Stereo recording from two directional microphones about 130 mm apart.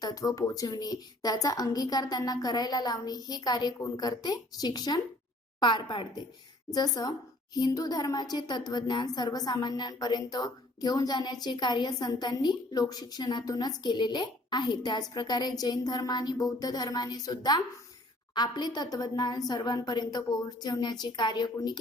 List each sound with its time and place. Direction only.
0.0 s a woman's voice: 30° left (ahead or behind)